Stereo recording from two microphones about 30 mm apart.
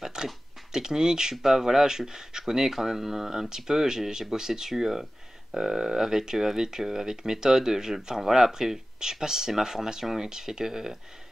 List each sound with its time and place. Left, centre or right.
0.0 s a sound: right
0.7 s speech: centre
1.3 s speech: centre
1.9 s speech: centre